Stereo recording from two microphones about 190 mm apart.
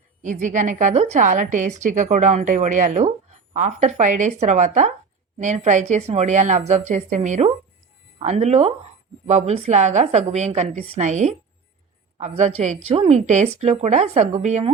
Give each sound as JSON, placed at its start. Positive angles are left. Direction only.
{"t": 0.2, "sound": "a woman's voice", "side_deg": -40}